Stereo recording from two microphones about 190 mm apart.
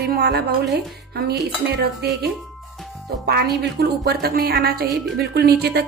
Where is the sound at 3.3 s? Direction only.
60° right (ahead or behind).